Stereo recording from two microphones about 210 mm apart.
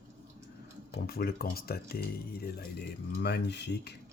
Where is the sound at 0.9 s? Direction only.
45° left (ahead or behind).